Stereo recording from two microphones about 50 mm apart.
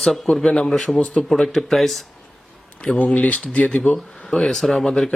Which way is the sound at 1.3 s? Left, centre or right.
Centre.